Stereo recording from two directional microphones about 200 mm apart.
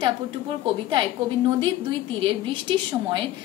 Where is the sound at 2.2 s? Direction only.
25° right (ahead or behind).